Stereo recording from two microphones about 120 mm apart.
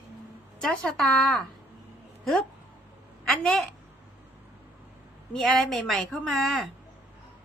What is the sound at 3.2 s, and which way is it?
Speech, 5° left (ahead or behind).